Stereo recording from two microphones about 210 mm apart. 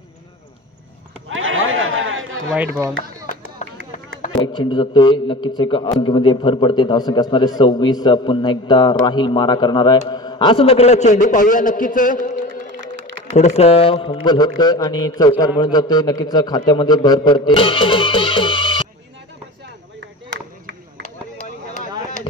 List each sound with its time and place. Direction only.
1.3 s chatter: 70° right (ahead or behind)
2.5 s speech: 10° right (ahead or behind)
4.4 s a man's voice: 20° left (ahead or behind)